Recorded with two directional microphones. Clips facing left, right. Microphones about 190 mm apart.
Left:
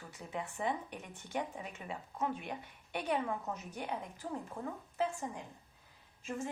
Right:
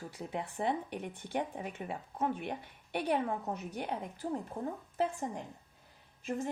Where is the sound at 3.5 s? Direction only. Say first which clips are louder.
Right 3 dB; 55° right (ahead or behind).